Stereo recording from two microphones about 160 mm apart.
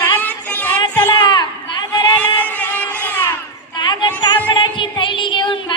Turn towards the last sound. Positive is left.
turn(degrees=30)  # may be behind; listen again after turning